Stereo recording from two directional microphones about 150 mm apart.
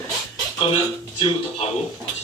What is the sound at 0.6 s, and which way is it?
Speech, 35° left (ahead or behind).